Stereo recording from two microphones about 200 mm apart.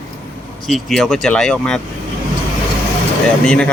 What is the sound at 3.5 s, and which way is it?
Speech, 5° left (ahead or behind).